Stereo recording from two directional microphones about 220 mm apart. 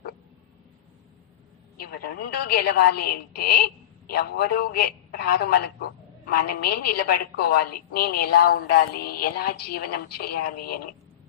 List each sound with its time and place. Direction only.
1.9 s a woman's voice: 45° left (ahead or behind)